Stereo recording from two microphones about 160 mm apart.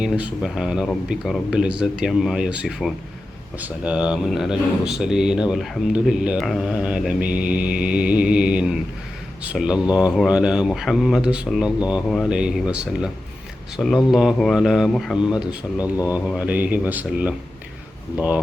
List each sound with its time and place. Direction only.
0.0 s a man's voice: 5° right (ahead or behind)
12.0 s a man's voice: 5° left (ahead or behind)
16.0 s speech: 20° left (ahead or behind)
16.3 s speech: 10° right (ahead or behind)